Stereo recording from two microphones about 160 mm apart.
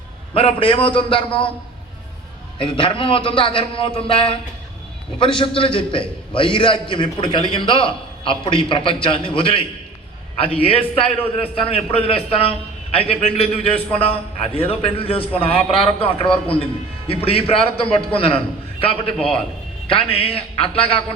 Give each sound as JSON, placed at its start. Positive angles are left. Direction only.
{"t": 0.3, "sound": "a man's voice", "side_deg": 35}
{"t": 2.6, "sound": "a man's voice", "side_deg": 30}